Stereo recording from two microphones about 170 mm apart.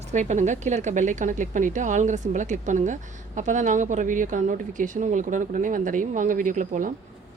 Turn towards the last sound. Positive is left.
turn(degrees=-50)  # may be behind; listen again after turning